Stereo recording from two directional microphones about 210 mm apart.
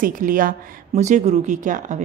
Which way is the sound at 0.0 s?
40° right (ahead or behind).